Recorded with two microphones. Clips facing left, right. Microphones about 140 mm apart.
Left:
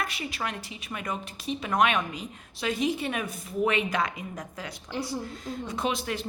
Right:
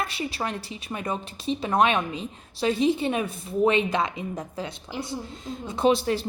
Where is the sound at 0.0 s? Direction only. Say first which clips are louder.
Right 3 dB; 30° right (ahead or behind).